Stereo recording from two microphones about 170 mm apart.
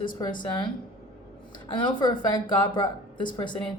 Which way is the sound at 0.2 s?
20° left (ahead or behind).